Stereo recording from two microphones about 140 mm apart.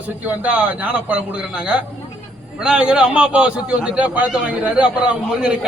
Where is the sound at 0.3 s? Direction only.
10° right (ahead or behind).